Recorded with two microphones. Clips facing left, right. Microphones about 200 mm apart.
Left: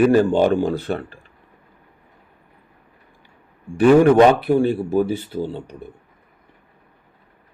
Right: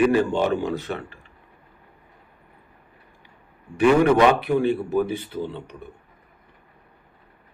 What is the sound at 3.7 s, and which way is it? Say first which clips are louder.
Speech: left 5 dB; 35° left (ahead or behind).